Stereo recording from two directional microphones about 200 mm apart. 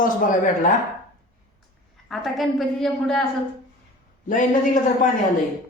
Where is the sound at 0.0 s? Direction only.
40° left (ahead or behind).